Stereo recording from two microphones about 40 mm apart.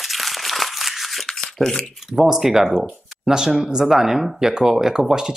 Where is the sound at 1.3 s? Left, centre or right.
Centre.